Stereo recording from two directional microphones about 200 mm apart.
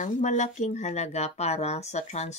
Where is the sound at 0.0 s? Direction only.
40° left (ahead or behind).